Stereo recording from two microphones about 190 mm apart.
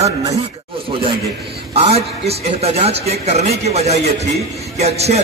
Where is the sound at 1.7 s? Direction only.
30° right (ahead or behind).